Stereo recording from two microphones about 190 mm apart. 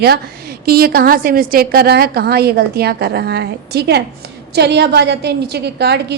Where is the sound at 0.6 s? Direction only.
55° right (ahead or behind).